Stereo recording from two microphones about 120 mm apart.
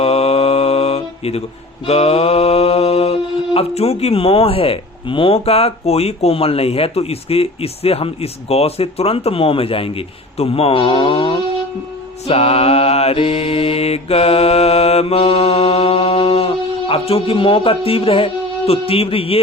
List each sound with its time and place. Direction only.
0.0 s mantra: 55° left (ahead or behind)